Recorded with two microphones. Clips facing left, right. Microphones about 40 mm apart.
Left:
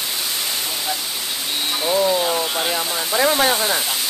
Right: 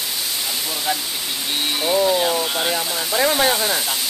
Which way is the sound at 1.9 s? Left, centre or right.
Centre.